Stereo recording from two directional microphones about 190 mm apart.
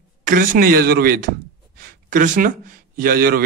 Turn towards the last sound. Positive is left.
turn(degrees=-50)  # may be behind; listen again after turning